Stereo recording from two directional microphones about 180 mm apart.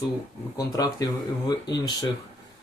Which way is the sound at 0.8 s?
20° left (ahead or behind).